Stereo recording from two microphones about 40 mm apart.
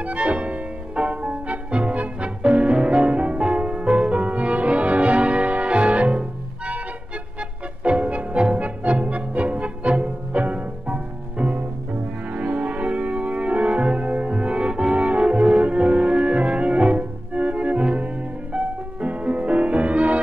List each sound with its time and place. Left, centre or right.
0.0 s music: right
7.8 s music: right